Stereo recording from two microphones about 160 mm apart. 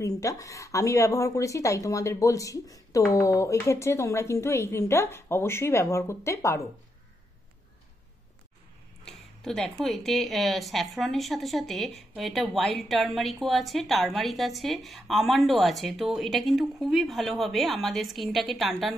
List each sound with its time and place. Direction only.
0.0 s speech: 20° left (ahead or behind)
9.0 s a woman's voice: 5° left (ahead or behind)